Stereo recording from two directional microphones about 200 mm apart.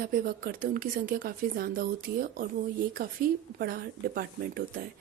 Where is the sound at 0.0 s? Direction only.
45° right (ahead or behind).